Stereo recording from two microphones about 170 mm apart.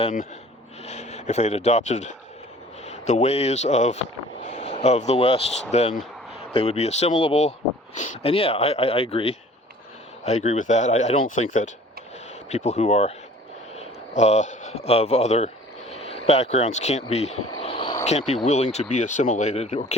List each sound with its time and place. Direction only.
0.9 s speech: 40° left (ahead or behind)
17.6 s vehicle: 30° left (ahead or behind)
18.0 s speech: 40° left (ahead or behind)